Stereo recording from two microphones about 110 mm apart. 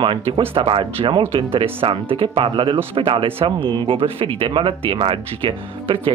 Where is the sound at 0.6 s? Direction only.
55° right (ahead or behind).